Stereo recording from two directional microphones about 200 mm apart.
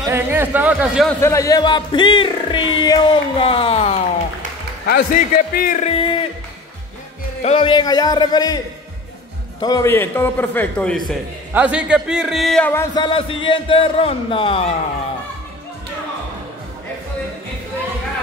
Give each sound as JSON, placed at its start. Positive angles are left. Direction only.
{"t": 0.0, "sound": "speech", "side_deg": -10}
{"t": 1.2, "sound": "speech", "side_deg": 15}
{"t": 4.8, "sound": "a man's voice", "side_deg": 50}
{"t": 7.4, "sound": "speech", "side_deg": 25}
{"t": 9.6, "sound": "a man's voice", "side_deg": 20}
{"t": 11.5, "sound": "a man's voice", "side_deg": -5}
{"t": 12.9, "sound": "speech", "side_deg": 25}